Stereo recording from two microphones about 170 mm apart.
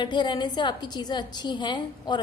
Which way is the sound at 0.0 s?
25° left (ahead or behind).